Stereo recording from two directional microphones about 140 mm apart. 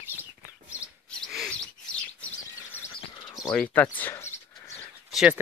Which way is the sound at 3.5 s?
10° left (ahead or behind).